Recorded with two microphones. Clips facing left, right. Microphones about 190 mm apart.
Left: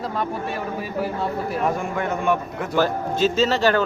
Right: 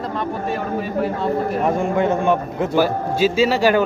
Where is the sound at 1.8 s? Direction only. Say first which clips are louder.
Right 7 dB; 25° right (ahead or behind).